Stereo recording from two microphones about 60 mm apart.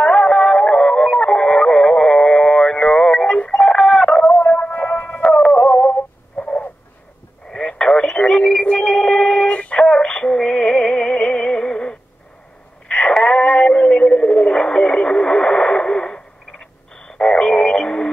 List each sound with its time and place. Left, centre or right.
0.0 s music: centre
4.4 s music: left
5.6 s synthetic singing: left
7.5 s radio: centre
9.5 s synthetic singing: left
12.8 s a sound: centre